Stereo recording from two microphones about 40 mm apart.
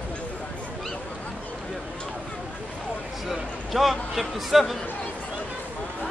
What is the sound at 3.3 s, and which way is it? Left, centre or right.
Speech, centre.